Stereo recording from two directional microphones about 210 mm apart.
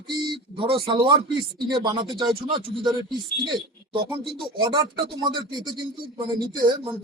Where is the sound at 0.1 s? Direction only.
20° right (ahead or behind).